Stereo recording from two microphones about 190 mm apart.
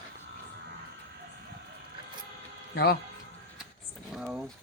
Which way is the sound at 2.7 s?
55° left (ahead or behind).